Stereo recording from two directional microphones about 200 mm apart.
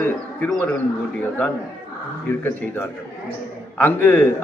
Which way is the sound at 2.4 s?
10° left (ahead or behind).